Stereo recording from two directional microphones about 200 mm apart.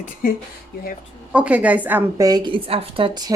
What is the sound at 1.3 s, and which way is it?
A woman's voice, 5° right (ahead or behind).